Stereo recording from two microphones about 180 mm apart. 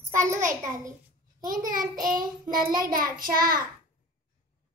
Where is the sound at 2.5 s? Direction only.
50° right (ahead or behind).